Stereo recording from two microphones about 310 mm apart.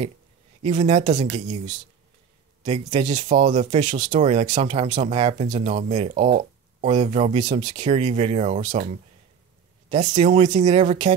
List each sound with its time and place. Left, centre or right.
0.6 s speech: right